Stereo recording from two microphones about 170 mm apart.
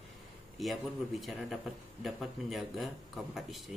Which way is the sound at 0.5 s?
Centre (ahead or behind).